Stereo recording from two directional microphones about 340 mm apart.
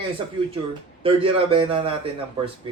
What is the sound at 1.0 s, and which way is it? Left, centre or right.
Speech, centre.